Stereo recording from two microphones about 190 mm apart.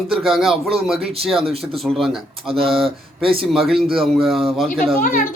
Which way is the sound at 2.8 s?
30° right (ahead or behind).